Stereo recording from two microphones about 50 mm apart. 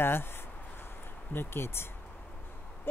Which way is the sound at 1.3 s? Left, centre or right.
Left.